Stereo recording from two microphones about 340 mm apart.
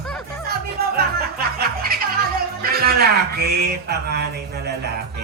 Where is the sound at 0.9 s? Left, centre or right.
Right.